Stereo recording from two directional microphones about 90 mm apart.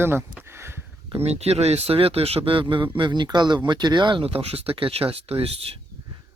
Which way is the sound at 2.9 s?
60° right (ahead or behind).